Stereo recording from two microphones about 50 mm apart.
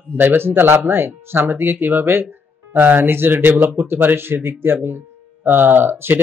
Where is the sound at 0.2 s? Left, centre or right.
Right.